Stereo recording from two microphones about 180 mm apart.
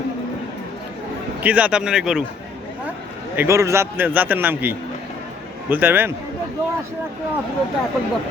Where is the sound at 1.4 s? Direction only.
5° right (ahead or behind).